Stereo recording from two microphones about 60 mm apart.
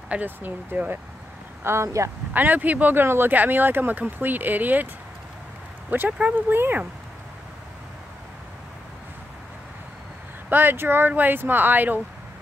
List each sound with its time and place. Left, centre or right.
0.1 s speech: right
1.6 s speech: right
2.3 s speech: right
5.9 s speech: right
10.5 s speech: right